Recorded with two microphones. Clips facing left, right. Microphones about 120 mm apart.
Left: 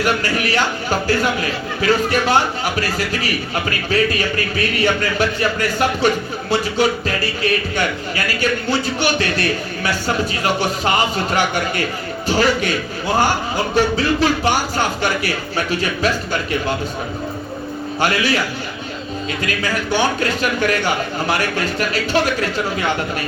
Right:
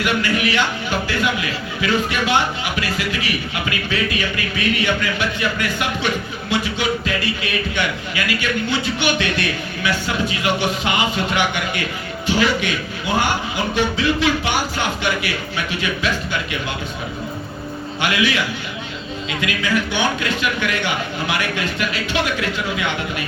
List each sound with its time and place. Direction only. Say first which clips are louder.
0.0 s a man's voice: left 1 dB; 40° left (ahead or behind)
18.0 s a man's voice: left 2 dB; 40° left (ahead or behind)